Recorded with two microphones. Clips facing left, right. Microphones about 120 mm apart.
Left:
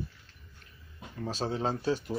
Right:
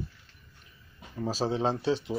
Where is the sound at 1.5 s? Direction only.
20° right (ahead or behind).